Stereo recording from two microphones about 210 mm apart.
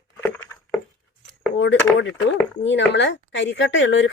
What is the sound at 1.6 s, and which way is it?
A woman's voice, 60° left (ahead or behind).